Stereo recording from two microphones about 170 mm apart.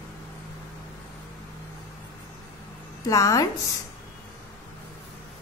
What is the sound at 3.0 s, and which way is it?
Speech, 20° left (ahead or behind).